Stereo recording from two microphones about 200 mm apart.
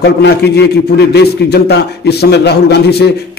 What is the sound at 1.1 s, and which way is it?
A man's voice, 55° left (ahead or behind).